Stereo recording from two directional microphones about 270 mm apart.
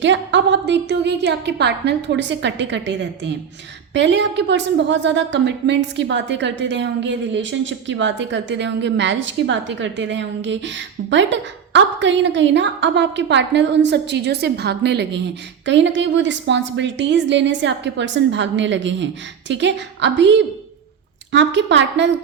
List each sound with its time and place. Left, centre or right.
0.0 s a woman's voice: right